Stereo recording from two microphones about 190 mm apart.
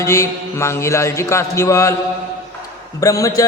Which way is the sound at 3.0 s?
15° left (ahead or behind).